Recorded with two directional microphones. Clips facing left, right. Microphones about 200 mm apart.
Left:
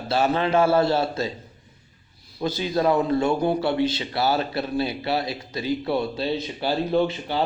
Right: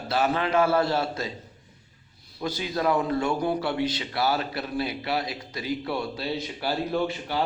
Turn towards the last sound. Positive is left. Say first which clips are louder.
# left 5 dB
turn(degrees=25)  # may be behind; listen again after turning